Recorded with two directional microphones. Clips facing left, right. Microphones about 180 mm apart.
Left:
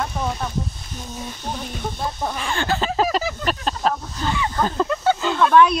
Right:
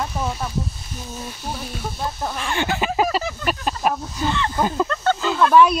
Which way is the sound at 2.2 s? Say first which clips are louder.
Left 2 dB; centre (ahead or behind).